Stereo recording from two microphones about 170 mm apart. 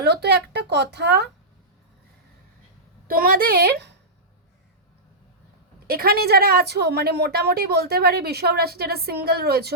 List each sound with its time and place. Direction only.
0.0 s a woman's voice: 75° right (ahead or behind)
3.1 s speech: 60° right (ahead or behind); by 3.9 s 80° right
5.9 s a woman's voice: 65° right (ahead or behind)